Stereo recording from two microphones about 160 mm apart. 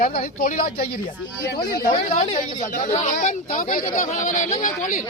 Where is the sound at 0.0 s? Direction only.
65° left (ahead or behind).